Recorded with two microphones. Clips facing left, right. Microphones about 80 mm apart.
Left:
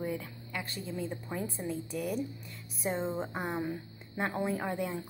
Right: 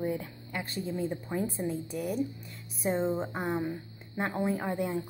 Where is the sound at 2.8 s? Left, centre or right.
Centre.